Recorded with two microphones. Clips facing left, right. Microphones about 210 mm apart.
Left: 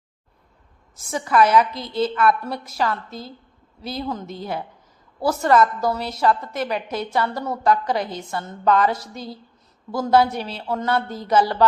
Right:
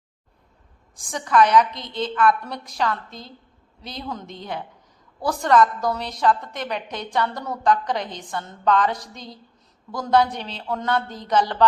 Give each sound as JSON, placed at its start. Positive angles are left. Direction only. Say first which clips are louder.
{"t": 1.1, "sound": "a woman's voice", "louder": "even", "side_deg": 5}